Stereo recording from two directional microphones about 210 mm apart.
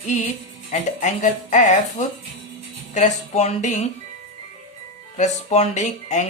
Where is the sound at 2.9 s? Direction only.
35° left (ahead or behind).